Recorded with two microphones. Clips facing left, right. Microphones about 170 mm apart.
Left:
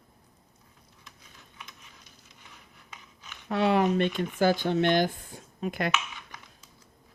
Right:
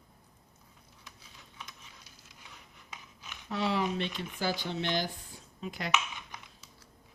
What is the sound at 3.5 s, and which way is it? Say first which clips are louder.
Speech: left 7 dB; 55° left (ahead or behind).